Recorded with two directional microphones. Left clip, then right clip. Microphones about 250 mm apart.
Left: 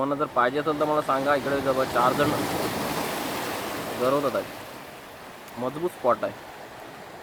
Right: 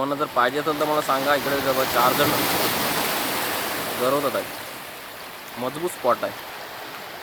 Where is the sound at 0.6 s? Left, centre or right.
Centre.